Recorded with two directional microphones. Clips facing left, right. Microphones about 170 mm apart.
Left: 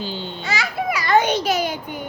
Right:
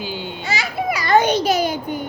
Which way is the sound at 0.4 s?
25° right (ahead or behind).